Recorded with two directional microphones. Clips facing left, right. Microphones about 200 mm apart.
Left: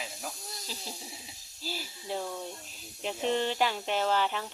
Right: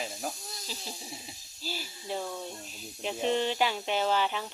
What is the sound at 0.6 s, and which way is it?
Speech, 5° right (ahead or behind).